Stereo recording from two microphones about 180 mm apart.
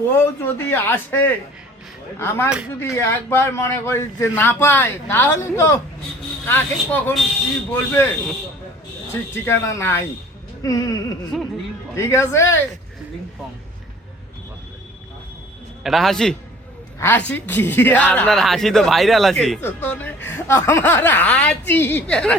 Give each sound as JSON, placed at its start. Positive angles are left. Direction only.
{"t": 0.1, "sound": "speech", "side_deg": 10}
{"t": 9.3, "sound": "speech", "side_deg": 15}
{"t": 11.3, "sound": "a man's voice", "side_deg": 0}
{"t": 11.9, "sound": "speech", "side_deg": 15}
{"t": 15.8, "sound": "a man's voice", "side_deg": 0}